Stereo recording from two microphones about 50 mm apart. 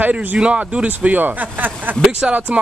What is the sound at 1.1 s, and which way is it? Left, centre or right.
Speech, right.